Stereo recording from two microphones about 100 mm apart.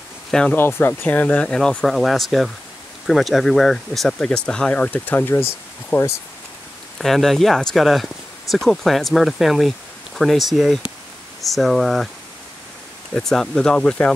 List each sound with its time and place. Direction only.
0.3 s speech: 10° left (ahead or behind)
0.6 s speech: 25° left (ahead or behind)
7.0 s speech: 5° left (ahead or behind)
13.1 s speech: 5° left (ahead or behind)